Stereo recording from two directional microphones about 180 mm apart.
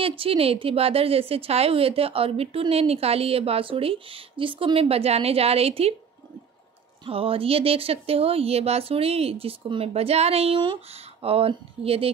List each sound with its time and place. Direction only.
0.0 s a woman's voice: 30° right (ahead or behind)
7.1 s a woman's voice: 30° right (ahead or behind)